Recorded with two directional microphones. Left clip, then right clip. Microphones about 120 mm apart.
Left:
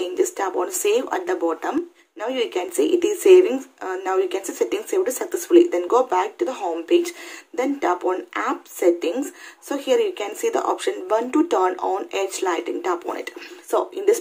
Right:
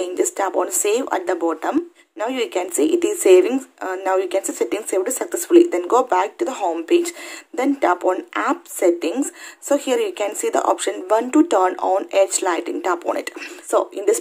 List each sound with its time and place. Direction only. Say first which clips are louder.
0.0 s speech: right 2 dB; 35° right (ahead or behind)
13.7 s speech: right 2 dB; 30° right (ahead or behind)